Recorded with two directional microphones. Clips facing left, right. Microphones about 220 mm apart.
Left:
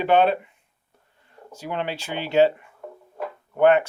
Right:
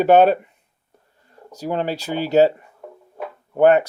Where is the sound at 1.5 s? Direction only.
40° right (ahead or behind).